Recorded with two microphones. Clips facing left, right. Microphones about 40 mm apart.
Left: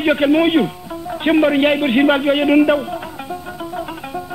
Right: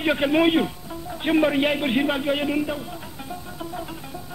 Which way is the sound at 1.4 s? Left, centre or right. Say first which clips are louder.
Left 7 dB; left.